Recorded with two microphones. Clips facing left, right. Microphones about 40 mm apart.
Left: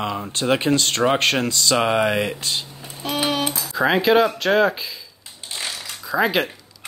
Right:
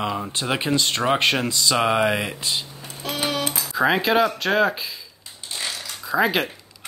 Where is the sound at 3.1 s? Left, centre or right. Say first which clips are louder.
Left 3 dB; centre.